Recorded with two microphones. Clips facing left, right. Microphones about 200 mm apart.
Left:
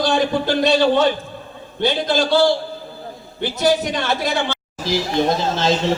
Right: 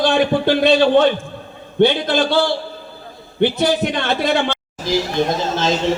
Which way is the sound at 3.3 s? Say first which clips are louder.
Right 2 dB; 60° right (ahead or behind).